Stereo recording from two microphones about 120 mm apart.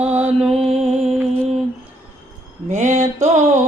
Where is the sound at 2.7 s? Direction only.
80° right.